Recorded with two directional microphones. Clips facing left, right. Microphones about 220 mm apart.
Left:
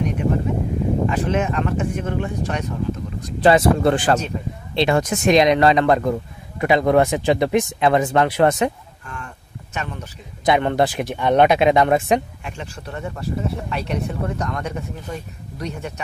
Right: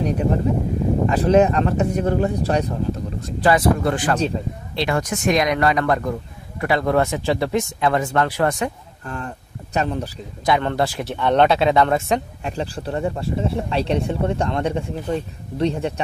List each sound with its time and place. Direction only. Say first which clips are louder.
0.0 s a sound: right 1 dB; 35° right (ahead or behind)
1.0 s speech: right 5 dB; 35° right (ahead or behind)
3.3 s speech: left 2 dB; 25° left (ahead or behind)
4.3 s speech: right 2 dB; 30° right (ahead or behind)
4.7 s speech: left 4 dB; 25° left (ahead or behind)
9.0 s a sound: right 6 dB; 35° right (ahead or behind)
9.8 s speech: right 8 dB; 35° right (ahead or behind)
10.4 s speech: left 2 dB; 20° left (ahead or behind)
12.4 s speech: right 7 dB; 35° right (ahead or behind)